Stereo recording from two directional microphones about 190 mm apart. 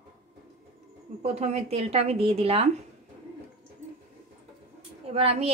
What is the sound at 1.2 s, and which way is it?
A woman's voice, 35° right (ahead or behind).